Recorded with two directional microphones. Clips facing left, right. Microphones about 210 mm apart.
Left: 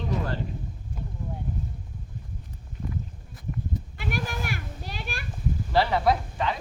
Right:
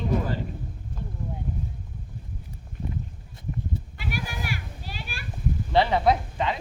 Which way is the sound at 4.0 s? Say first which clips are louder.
Left 2 dB; 50° left (ahead or behind).